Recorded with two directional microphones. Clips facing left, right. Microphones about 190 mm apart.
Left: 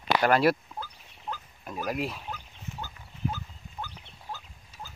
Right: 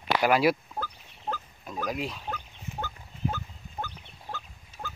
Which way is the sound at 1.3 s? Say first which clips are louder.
Right 4 dB; 40° right (ahead or behind).